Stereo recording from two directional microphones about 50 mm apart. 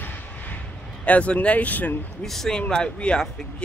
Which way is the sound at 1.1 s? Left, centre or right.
Left.